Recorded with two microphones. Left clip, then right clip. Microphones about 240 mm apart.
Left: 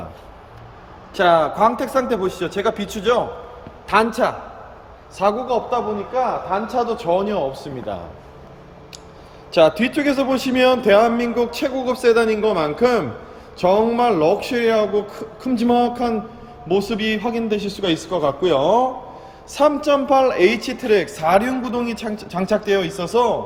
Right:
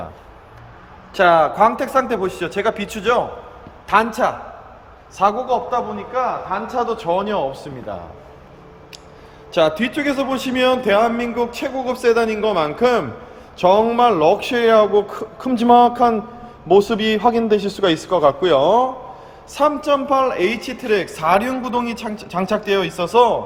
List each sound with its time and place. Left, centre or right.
1.1 s a man's voice: centre
9.5 s a man's voice: centre